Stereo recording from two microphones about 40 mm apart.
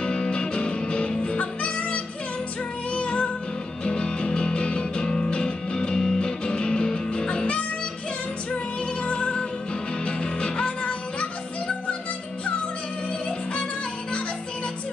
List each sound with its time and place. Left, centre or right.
0.0 s music: left
9.0 s music: left